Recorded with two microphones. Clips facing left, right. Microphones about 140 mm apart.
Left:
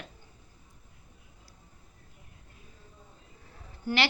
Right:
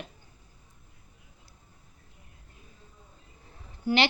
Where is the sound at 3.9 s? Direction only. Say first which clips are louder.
Right 4 dB; 15° right (ahead or behind).